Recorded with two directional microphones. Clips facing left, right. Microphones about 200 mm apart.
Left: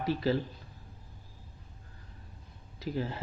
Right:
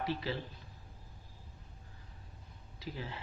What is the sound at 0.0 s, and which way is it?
Speech, 45° left (ahead or behind).